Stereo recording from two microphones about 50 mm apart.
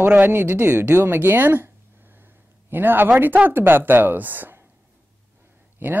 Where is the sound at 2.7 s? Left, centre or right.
Right.